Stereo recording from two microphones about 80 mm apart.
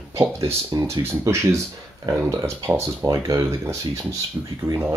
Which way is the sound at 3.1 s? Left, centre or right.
Right.